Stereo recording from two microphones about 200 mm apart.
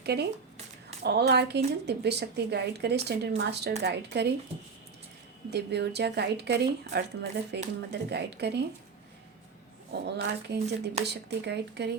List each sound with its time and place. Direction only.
0.0 s speech: 55° right (ahead or behind)
5.5 s speech: 55° right (ahead or behind)
9.9 s speech: 55° right (ahead or behind)